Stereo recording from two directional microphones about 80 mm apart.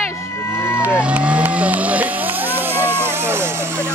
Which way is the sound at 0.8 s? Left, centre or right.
Centre.